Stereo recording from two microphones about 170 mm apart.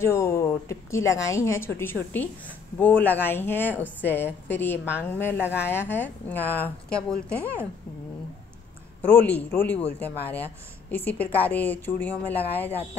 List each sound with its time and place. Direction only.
0.0 s speech: 15° left (ahead or behind)
9.0 s speech: 10° left (ahead or behind)